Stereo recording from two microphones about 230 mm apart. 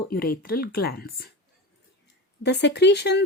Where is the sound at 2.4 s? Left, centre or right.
Left.